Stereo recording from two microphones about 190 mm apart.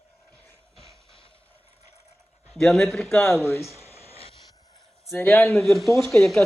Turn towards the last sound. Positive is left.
turn(degrees=0)  # may be behind; listen again after turning